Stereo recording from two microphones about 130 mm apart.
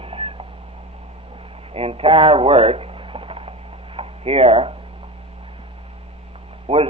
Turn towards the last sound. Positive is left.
turn(degrees=-50)  # may be behind; listen again after turning